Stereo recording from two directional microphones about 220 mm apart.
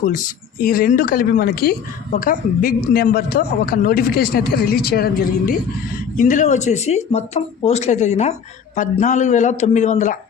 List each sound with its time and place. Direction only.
0.6 s speech: 40° left (ahead or behind)